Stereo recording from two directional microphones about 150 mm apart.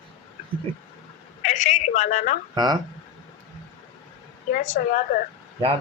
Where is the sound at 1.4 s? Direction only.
55° left (ahead or behind).